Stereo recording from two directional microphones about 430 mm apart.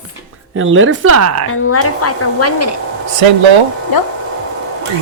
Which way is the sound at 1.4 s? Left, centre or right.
Left.